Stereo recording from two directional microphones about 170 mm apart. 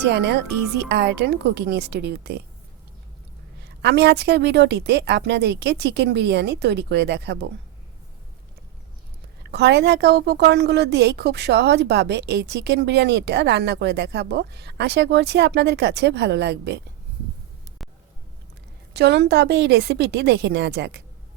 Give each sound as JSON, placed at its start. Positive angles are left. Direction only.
{"t": 0.0, "sound": "a woman's voice", "side_deg": -80}
{"t": 3.6, "sound": "a woman's voice", "side_deg": -80}
{"t": 9.5, "sound": "a woman's voice", "side_deg": -80}
{"t": 18.9, "sound": "a woman's voice", "side_deg": -80}